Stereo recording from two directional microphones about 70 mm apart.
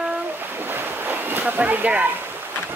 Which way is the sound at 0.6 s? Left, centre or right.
Right.